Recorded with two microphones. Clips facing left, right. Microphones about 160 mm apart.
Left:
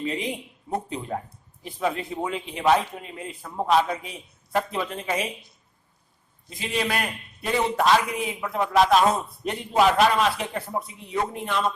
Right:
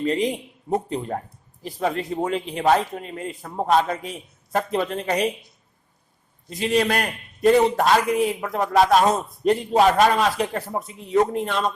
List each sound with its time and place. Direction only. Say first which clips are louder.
0.0 s a man's voice: right 6 dB; 40° right (ahead or behind)
6.5 s a man's voice: right 6 dB; 40° right (ahead or behind)